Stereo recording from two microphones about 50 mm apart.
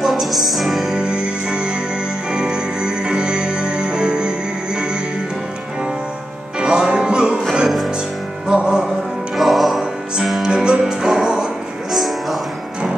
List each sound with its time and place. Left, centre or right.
0.0 s music: centre
0.9 s music: centre
6.6 s music: centre
8.5 s music: centre
9.4 s music: centre
10.4 s music: centre
11.9 s music: centre